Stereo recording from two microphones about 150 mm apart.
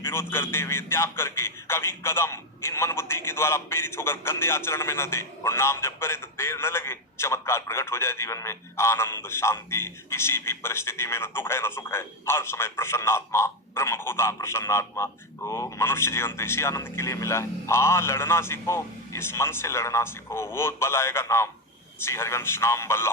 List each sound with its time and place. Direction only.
0.0 s a man's voice: 15° left (ahead or behind)